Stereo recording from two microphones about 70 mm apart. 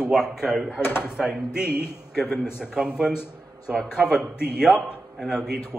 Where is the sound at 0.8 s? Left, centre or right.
Left.